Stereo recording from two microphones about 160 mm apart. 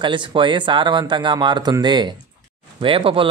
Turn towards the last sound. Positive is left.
turn(degrees=-35)  # may be behind; listen again after turning